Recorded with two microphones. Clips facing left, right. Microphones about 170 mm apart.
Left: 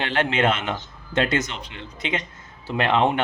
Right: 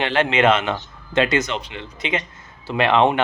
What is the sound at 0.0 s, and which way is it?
Speech, 90° right.